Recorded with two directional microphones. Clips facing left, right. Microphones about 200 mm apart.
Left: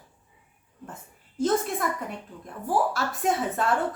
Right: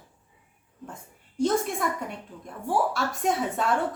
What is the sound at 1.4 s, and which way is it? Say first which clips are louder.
A woman's voice: even; centre (ahead or behind).